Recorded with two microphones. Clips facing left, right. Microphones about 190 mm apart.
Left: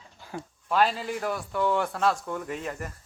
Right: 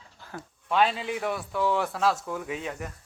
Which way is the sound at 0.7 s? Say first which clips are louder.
Even; centre (ahead or behind).